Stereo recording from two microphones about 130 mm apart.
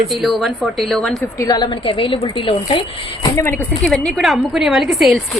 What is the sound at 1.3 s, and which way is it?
A woman's voice, 30° left (ahead or behind).